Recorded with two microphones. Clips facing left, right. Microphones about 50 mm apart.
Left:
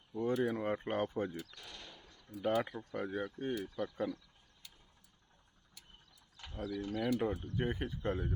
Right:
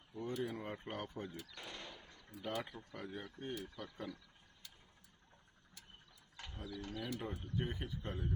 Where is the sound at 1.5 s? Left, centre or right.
Right.